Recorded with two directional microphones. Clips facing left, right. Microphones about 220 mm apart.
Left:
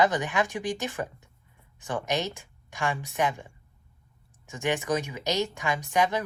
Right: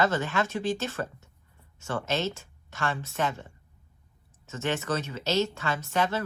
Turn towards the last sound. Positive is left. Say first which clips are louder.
# left 2 dB
turn(degrees=15)  # may be behind; listen again after turning